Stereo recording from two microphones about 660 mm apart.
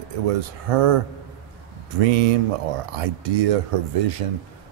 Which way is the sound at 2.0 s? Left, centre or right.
Right.